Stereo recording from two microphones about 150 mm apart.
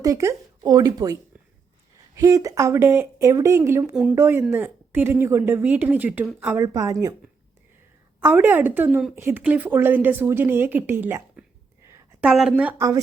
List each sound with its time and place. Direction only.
0.0 s speech: 20° right (ahead or behind)
3.9 s speech: 10° right (ahead or behind)
6.6 s speech: 20° right (ahead or behind)
8.2 s speech: 15° right (ahead or behind)